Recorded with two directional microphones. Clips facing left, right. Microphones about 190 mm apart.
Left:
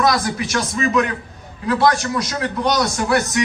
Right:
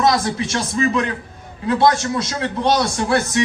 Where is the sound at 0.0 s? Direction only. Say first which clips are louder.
Right 1 dB; 25° right (ahead or behind).